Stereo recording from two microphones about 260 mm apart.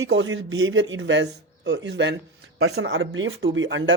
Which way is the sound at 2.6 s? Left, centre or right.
Right.